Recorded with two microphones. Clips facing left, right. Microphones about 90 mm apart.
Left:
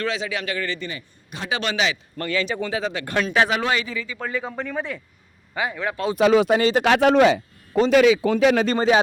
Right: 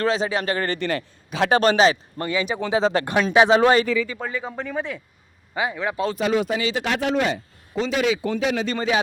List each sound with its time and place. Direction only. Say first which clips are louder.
0.0 s speech: right 4 dB; 35° right (ahead or behind)
0.8 s a man's voice: right 8 dB; 75° right (ahead or behind)
1.5 s speech: right 7 dB; 40° right (ahead or behind)
2.1 s speech: even; 20° right (ahead or behind)
2.9 s speech: right 8 dB; 40° right (ahead or behind)
3.3 s speech: right 6 dB; 20° right (ahead or behind)
3.6 s speech: right 7 dB; 40° right (ahead or behind)
4.2 s speech: left 1 dB; centre (ahead or behind)
5.5 s speech: right 1 dB; 15° right (ahead or behind)
6.1 s a man's voice: left 9 dB; 75° left (ahead or behind)
6.6 s speech: left 6 dB; 45° left (ahead or behind)
6.8 s a man's voice: left 8 dB; 75° left (ahead or behind)
8.6 s speech: left 4 dB; 35° left (ahead or behind)